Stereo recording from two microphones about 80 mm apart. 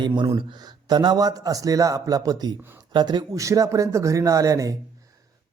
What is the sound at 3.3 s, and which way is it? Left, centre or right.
Speech, right.